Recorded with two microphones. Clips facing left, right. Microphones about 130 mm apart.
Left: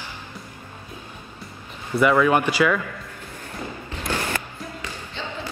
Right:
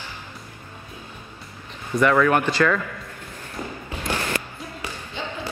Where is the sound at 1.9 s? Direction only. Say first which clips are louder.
Even; 10° left (ahead or behind).